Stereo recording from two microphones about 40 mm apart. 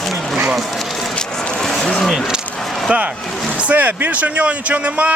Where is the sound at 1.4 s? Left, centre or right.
Centre.